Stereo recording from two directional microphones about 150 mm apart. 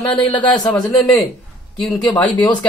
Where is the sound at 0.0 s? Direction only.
30° left (ahead or behind).